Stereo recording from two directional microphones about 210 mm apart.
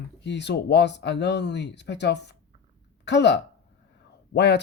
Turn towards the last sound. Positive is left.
turn(degrees=55)  # may be behind; listen again after turning